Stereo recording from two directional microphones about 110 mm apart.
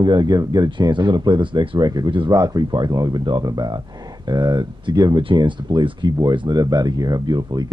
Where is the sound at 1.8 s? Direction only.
35° right (ahead or behind).